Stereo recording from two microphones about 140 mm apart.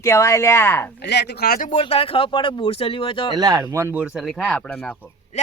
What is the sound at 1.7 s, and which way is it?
Speech, 45° left (ahead or behind).